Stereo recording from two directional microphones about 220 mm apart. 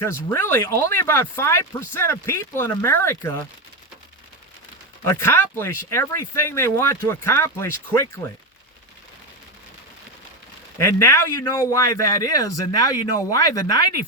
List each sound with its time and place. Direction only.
0.0 s speech: 10° left (ahead or behind)
5.0 s speech: 10° left (ahead or behind)
10.8 s speech: 10° left (ahead or behind)